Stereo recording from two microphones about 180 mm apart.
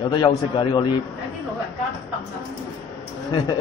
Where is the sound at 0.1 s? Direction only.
25° left (ahead or behind).